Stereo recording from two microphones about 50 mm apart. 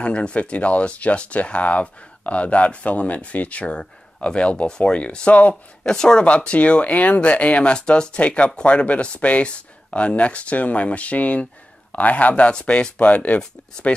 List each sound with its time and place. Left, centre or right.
0.0 s speech: left
5.9 s speech: centre; by 13.4 s left